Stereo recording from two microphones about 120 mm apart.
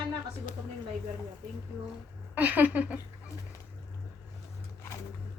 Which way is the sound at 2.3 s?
15° right (ahead or behind).